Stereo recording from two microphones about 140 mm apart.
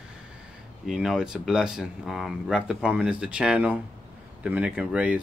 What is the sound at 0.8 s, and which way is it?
Speech, 5° right (ahead or behind).